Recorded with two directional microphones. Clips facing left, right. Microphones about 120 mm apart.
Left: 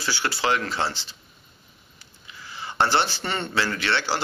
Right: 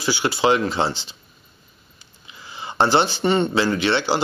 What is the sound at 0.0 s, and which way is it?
Speech, 15° right (ahead or behind).